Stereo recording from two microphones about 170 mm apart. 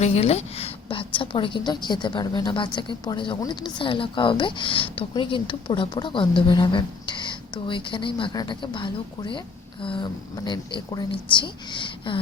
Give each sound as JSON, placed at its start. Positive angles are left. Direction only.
{"t": 0.0, "sound": "a woman's voice", "side_deg": 40}